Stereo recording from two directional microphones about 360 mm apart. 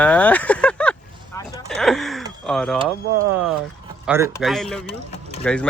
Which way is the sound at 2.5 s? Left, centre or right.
Centre.